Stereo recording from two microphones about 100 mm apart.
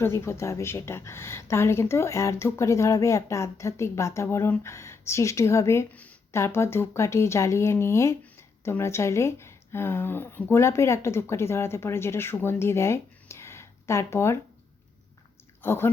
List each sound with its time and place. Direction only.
0.0 s speech: 25° left (ahead or behind)
5.9 s a sound: 15° left (ahead or behind)
6.3 s speech: 25° left (ahead or behind)
15.6 s speech: 25° left (ahead or behind)